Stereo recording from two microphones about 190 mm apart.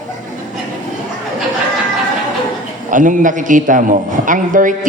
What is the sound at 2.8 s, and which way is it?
A man's voice, 45° right (ahead or behind).